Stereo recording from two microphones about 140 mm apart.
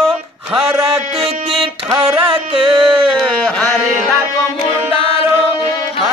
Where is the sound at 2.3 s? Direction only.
40° right (ahead or behind).